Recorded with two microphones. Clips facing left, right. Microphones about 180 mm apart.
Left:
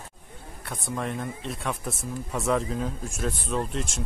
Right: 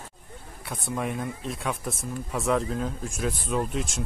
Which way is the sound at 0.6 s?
5° right (ahead or behind).